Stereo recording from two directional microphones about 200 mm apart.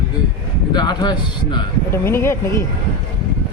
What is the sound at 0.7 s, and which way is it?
Speech, 20° left (ahead or behind).